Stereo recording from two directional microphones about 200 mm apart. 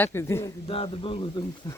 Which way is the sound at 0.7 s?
25° left (ahead or behind).